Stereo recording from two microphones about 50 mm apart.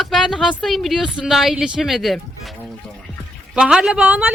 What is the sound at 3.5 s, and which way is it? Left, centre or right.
Speech, centre.